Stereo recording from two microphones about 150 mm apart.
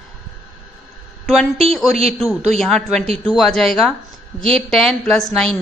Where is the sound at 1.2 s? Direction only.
Centre (ahead or behind).